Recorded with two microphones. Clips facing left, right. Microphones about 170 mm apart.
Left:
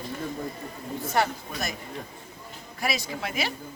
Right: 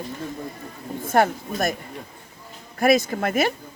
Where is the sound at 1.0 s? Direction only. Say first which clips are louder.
Right 6 dB; 50° right (ahead or behind).